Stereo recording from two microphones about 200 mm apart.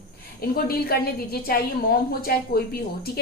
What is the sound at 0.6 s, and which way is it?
A woman's voice, 50° left (ahead or behind).